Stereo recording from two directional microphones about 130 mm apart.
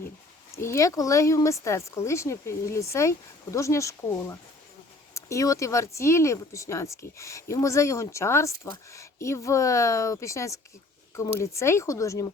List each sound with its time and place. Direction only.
0.5 s speech: 20° left (ahead or behind)